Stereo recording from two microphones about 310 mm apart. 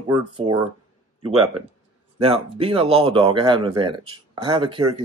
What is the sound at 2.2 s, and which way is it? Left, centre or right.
Speech, centre.